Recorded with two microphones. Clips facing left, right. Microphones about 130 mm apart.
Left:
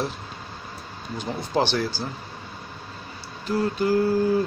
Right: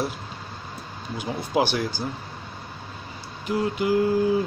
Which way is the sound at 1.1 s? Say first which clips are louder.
Right 1 dB; 10° right (ahead or behind).